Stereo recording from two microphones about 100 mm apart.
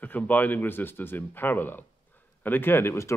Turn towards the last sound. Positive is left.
turn(degrees=25)  # may be behind; listen again after turning